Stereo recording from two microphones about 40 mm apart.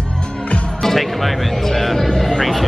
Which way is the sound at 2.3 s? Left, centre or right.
Centre.